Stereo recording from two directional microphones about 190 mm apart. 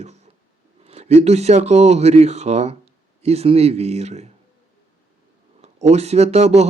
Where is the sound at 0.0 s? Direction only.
35° right (ahead or behind).